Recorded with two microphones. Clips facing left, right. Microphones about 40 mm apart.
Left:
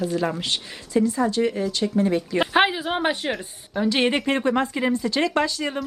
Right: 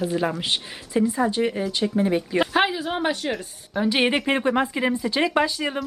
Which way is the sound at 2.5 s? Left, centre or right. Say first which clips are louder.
Left 2 dB; centre.